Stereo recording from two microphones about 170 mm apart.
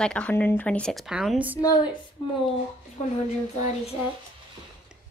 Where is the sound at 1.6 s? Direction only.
25° left (ahead or behind).